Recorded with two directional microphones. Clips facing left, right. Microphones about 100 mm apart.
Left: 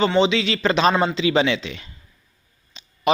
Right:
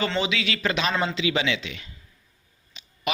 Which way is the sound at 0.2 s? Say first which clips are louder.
Left 8 dB; 30° left (ahead or behind).